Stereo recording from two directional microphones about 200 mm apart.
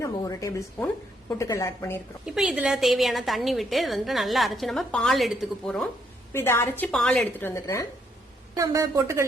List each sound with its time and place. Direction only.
0.0 s a woman's voice: 15° left (ahead or behind)
2.2 s a woman's voice: centre (ahead or behind); by 7.9 s 15° left (ahead or behind)
8.5 s a woman's voice: 15° right (ahead or behind)